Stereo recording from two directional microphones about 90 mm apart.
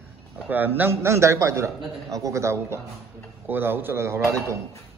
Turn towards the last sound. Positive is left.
turn(degrees=-30)  # may be behind; listen again after turning